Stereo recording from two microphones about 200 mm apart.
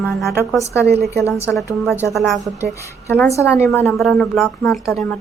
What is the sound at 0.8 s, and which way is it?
Speech, 55° right (ahead or behind).